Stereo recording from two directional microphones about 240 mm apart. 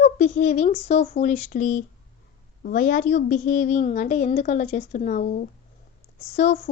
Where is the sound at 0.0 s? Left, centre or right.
Left.